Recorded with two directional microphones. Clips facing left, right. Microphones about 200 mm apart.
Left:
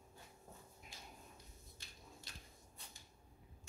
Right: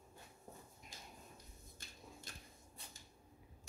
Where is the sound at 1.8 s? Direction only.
45° right (ahead or behind).